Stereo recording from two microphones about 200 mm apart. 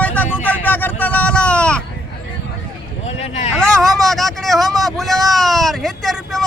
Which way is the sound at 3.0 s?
30° left (ahead or behind).